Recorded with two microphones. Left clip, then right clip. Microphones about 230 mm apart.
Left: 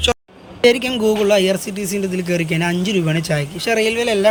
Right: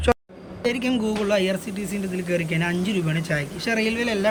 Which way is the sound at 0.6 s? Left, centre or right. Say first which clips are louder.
Left 10 dB; left.